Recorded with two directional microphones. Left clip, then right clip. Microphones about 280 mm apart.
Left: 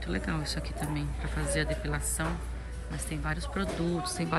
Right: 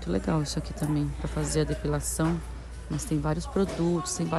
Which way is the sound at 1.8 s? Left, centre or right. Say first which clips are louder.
Right 5 dB; right.